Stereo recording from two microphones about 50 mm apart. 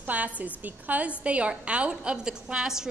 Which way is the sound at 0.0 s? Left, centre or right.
Right.